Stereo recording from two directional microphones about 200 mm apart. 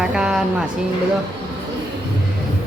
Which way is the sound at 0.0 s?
5° right (ahead or behind).